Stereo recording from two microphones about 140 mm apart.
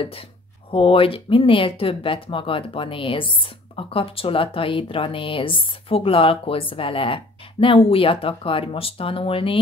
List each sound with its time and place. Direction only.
0.7 s speech: 40° left (ahead or behind)